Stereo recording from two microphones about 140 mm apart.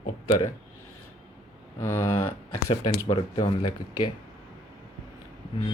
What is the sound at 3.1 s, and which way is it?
Speech, 35° left (ahead or behind).